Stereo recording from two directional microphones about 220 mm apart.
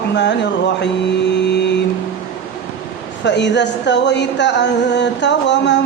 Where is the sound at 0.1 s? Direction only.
50° left (ahead or behind).